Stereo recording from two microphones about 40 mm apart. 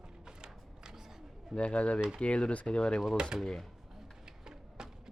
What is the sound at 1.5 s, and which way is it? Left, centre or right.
Speech, left.